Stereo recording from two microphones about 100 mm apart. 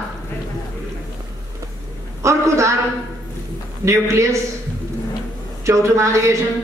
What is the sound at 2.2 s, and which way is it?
Speech, 30° right (ahead or behind).